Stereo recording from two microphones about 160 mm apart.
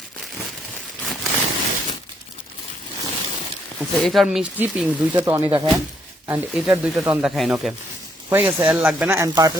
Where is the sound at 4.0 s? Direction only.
Centre (ahead or behind).